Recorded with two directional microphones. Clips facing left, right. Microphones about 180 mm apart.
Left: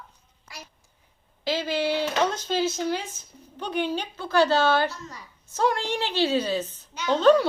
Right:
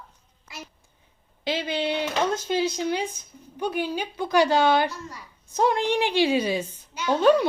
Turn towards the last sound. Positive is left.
turn(degrees=-10)  # may be behind; listen again after turning